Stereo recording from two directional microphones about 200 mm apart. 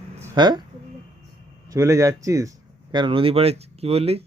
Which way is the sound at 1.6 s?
15° right (ahead or behind).